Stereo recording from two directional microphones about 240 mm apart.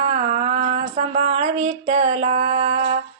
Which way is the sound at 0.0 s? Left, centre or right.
Right.